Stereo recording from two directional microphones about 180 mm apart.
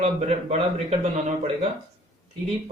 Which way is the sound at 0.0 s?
35° right (ahead or behind).